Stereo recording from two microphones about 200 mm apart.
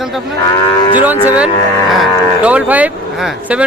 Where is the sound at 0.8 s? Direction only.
20° left (ahead or behind).